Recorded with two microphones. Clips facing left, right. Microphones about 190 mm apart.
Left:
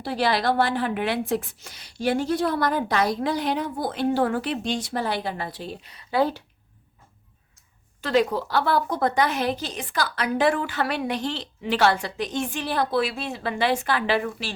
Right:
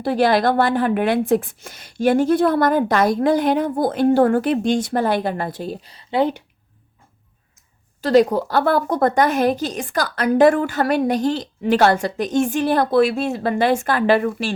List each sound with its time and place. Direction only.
0.0 s a woman's voice: 50° right (ahead or behind); by 6.4 s 20° right (ahead or behind)
8.0 s a woman's voice: 40° right (ahead or behind)